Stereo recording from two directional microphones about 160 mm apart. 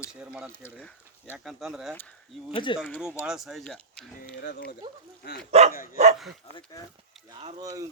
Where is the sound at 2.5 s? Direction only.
30° left (ahead or behind).